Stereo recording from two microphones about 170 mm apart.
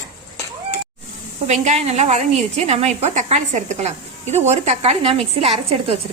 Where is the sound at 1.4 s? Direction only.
40° right (ahead or behind).